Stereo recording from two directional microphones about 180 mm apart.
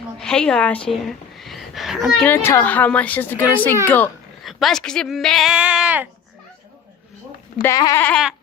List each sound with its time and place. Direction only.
0.2 s a woman's voice: 5° left (ahead or behind)
1.4 s a sound: centre (ahead or behind)
2.1 s a child's voice: 10° left (ahead or behind); by 6.1 s 5° right (ahead or behind)
7.6 s a child's voice: 20° left (ahead or behind)
8.0 s speech: centre (ahead or behind)